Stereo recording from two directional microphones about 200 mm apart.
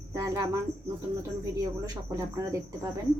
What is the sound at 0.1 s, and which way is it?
Speech, 15° right (ahead or behind).